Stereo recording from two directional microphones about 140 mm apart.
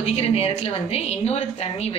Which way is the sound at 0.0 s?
50° left (ahead or behind).